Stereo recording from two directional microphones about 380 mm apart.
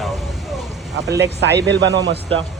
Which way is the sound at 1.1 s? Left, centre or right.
Right.